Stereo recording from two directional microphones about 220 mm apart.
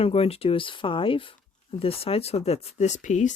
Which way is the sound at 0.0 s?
25° left (ahead or behind).